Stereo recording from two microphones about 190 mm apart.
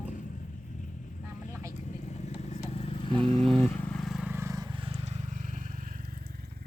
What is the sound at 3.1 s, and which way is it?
Vehicle, 25° right (ahead or behind).